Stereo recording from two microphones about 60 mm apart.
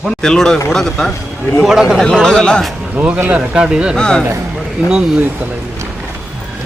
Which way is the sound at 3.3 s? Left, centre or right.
Centre.